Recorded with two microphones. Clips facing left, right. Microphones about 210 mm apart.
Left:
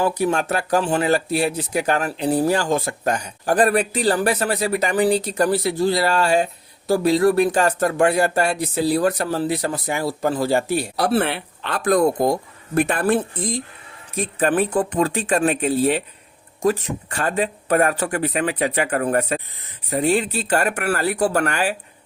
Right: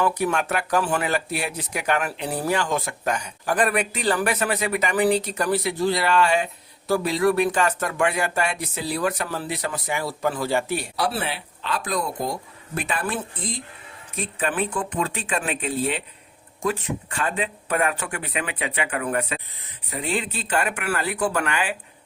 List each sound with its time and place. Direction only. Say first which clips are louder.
0.0 s speech: left 3 dB; 30° left (ahead or behind)